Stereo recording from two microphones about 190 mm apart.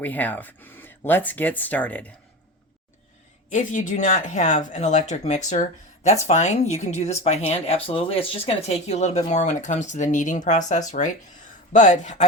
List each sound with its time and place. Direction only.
0.0 s speech: 10° left (ahead or behind)
3.5 s speech: 45° left (ahead or behind)